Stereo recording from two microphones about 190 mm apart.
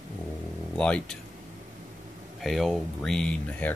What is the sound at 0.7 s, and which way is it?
Speech, 5° left (ahead or behind).